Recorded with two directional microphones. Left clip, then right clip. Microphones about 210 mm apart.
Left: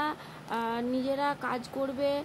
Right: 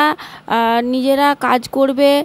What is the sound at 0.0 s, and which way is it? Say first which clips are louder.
A woman's voice: right 17 dB; 45° right (ahead or behind).